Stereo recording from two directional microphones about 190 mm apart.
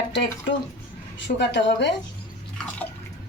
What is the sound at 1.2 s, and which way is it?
Speech, 65° left (ahead or behind).